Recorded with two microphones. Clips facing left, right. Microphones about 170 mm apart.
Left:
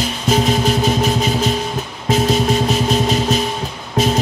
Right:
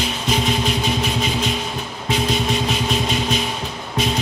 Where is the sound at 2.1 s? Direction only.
40° left (ahead or behind).